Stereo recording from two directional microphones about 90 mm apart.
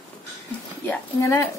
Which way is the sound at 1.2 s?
25° left (ahead or behind).